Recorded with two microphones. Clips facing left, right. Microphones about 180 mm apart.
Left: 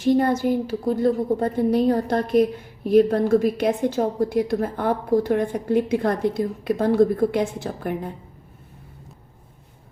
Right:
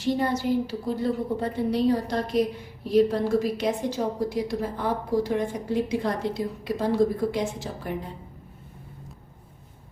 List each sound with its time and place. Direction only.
0.0 s a woman's voice: 50° left (ahead or behind)